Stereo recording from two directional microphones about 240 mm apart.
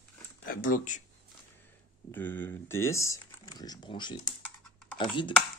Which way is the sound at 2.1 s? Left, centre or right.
Centre.